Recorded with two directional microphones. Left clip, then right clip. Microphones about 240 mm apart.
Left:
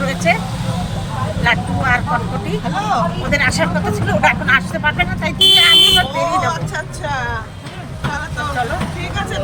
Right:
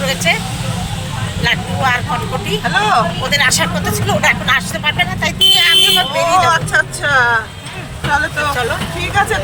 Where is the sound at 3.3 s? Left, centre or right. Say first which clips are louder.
Right 1 dB; centre.